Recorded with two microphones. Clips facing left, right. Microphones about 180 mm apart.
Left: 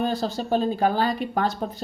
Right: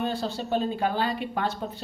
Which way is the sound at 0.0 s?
40° left (ahead or behind).